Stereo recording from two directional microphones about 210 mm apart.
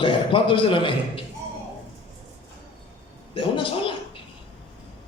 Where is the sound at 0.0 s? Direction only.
25° left (ahead or behind).